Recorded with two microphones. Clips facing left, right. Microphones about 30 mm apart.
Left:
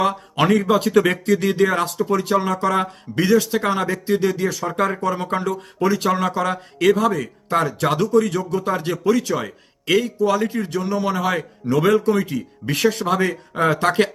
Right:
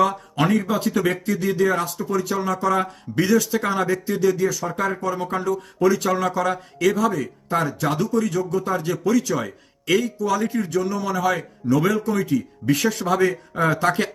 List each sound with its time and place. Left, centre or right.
0.0 s speech: left
6.9 s speech: left
9.0 s a man's voice: left
10.7 s speech: left
13.7 s speech: left